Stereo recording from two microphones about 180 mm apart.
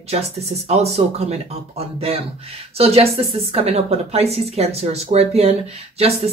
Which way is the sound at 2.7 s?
35° right (ahead or behind).